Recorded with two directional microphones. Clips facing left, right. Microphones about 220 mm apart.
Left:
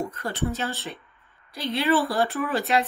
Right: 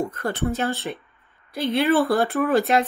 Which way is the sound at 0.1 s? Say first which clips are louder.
Right 4 dB; 55° right (ahead or behind).